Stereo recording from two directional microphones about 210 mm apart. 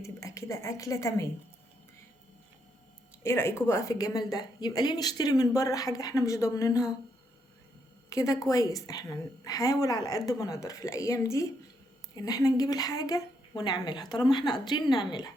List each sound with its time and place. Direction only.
0.0 s a woman's voice: 15° left (ahead or behind)
3.2 s a woman's voice: 10° left (ahead or behind)
8.1 s a woman's voice: 15° left (ahead or behind)